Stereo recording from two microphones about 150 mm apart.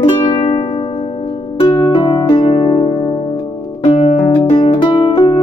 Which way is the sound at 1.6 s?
35° left (ahead or behind).